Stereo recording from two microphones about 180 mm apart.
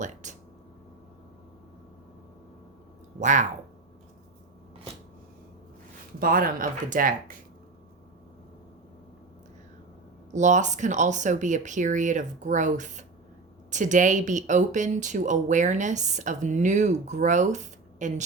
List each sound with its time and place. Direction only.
0.0 s speech: 40° right (ahead or behind)
3.2 s speech: 45° right (ahead or behind)
6.1 s speech: 55° right (ahead or behind)
10.3 s speech: 40° right (ahead or behind)